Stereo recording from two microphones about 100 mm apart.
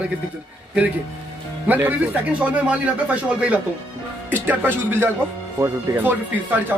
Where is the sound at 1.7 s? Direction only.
20° right (ahead or behind).